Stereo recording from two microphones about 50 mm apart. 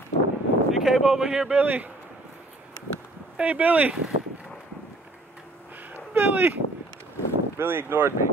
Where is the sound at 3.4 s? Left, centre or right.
Right.